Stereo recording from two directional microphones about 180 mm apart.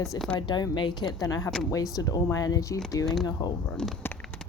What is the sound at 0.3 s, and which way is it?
Speech, 25° left (ahead or behind).